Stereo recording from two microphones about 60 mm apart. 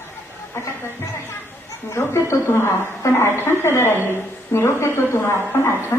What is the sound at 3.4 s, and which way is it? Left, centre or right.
A woman's voice, left.